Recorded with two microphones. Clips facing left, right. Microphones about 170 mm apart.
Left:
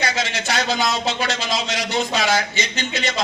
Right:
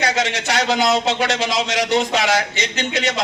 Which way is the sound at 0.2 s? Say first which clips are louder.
Right 3 dB; 70° right (ahead or behind).